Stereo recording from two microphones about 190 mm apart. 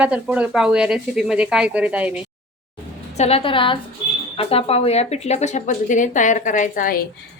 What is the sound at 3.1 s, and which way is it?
A woman's voice, 30° left (ahead or behind).